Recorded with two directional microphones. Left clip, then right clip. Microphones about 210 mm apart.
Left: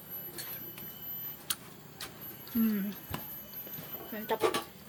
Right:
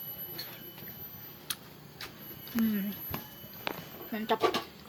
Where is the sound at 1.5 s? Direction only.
5° left (ahead or behind).